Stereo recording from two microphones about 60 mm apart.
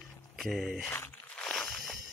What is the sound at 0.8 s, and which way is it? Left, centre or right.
Speech, left.